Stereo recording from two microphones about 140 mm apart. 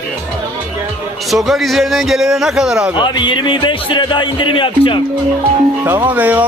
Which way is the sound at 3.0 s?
35° left (ahead or behind).